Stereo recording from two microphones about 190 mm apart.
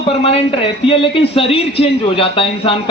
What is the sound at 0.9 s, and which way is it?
A man's voice, 30° left (ahead or behind).